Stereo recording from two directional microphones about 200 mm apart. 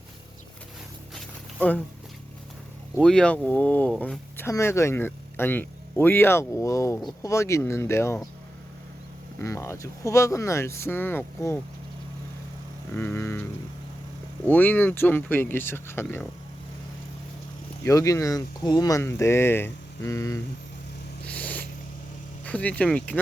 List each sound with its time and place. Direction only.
1.1 s a sound: 10° left (ahead or behind)
3.0 s speech: 5° left (ahead or behind)
9.4 s speech: 15° left (ahead or behind)
12.9 s speech: 10° left (ahead or behind)
14.4 s speech: 10° left (ahead or behind)
17.8 s speech: 15° left (ahead or behind)
21.2 s a sound: 5° left (ahead or behind)
22.4 s speech: 5° left (ahead or behind)